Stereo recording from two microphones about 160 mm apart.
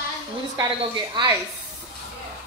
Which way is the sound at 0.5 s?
30° right (ahead or behind).